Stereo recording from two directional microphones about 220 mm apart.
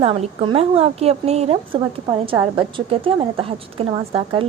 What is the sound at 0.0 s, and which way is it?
A woman's voice, 25° right (ahead or behind).